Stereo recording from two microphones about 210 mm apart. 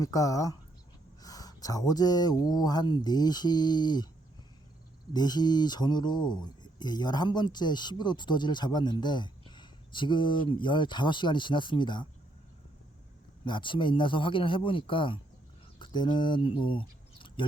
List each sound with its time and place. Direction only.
0.0 s speech: 15° left (ahead or behind)
5.1 s speech: 20° left (ahead or behind)
13.4 s speech: 25° left (ahead or behind)